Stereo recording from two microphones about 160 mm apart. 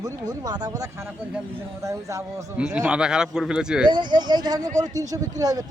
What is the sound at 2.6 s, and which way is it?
Speech, 5° right (ahead or behind).